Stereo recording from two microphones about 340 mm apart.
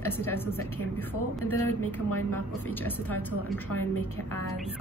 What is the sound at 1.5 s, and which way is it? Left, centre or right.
Speech, left.